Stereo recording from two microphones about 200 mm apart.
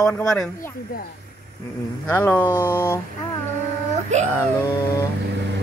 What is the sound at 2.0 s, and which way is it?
Speech, 10° left (ahead or behind).